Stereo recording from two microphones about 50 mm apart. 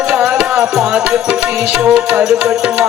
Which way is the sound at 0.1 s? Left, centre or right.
Right.